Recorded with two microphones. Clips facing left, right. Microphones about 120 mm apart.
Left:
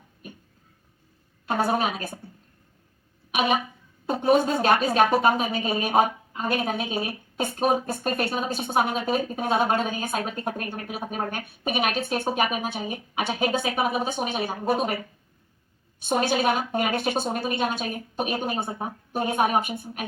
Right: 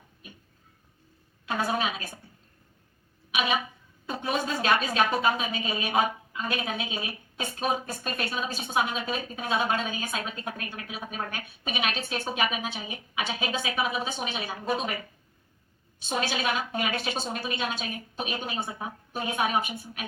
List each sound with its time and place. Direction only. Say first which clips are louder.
1.5 s speech: left 4 dB; 50° left (ahead or behind)
3.3 s speech: left 4 dB; 50° left (ahead or behind)
16.0 s speech: left 6 dB; 55° left (ahead or behind)